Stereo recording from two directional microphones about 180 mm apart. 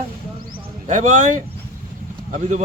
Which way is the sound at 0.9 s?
45° right (ahead or behind).